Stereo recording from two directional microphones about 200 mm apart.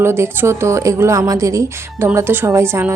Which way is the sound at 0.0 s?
10° right (ahead or behind).